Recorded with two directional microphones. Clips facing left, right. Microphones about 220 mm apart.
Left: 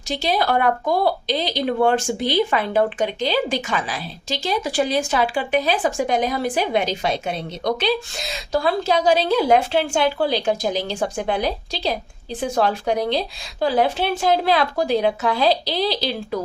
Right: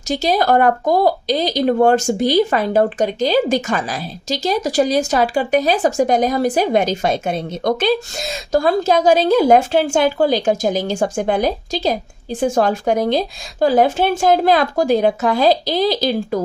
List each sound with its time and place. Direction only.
0.1 s speech: 45° right (ahead or behind)